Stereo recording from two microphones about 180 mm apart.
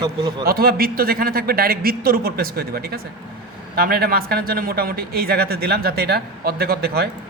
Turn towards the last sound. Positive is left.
turn(degrees=-60)  # may be behind; listen again after turning